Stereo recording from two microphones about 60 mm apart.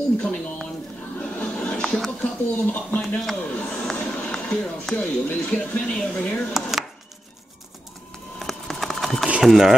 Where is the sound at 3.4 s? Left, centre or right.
Left.